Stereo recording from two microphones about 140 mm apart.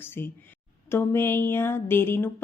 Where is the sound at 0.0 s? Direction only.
15° left (ahead or behind).